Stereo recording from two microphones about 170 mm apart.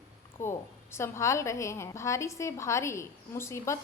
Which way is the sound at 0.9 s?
15° left (ahead or behind).